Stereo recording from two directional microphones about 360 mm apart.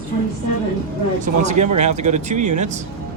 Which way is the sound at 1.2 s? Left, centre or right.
Centre.